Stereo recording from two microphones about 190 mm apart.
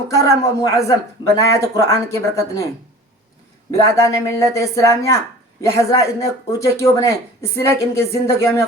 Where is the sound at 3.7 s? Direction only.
15° left (ahead or behind).